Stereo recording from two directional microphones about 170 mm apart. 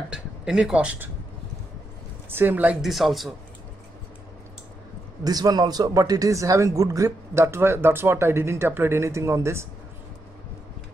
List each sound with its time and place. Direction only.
0.1 s speech: 5° right (ahead or behind)
2.3 s speech: 10° right (ahead or behind)
5.2 s speech: 25° right (ahead or behind)